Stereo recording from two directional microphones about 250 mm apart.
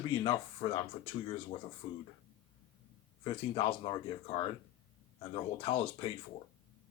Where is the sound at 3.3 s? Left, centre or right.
Left.